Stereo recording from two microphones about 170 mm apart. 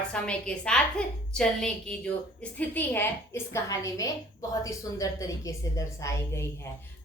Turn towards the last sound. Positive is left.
turn(degrees=15)  # may be behind; listen again after turning